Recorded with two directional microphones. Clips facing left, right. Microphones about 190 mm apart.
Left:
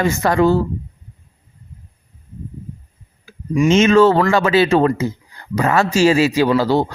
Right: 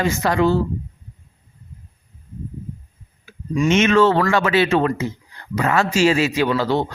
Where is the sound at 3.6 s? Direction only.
30° left (ahead or behind).